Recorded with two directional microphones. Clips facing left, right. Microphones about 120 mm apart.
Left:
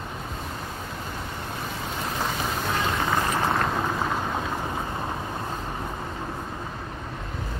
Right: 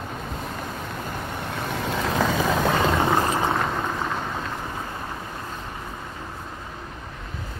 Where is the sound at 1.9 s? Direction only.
90° right.